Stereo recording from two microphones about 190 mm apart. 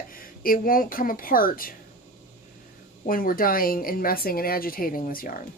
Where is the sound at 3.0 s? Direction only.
50° left (ahead or behind).